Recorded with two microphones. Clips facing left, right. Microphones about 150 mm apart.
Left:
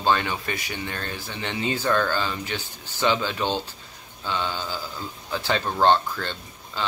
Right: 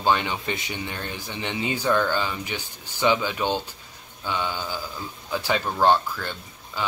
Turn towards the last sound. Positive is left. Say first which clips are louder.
# even
turn(degrees=-10)  # may be behind; listen again after turning